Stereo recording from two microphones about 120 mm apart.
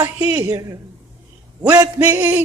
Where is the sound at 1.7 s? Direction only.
25° right (ahead or behind).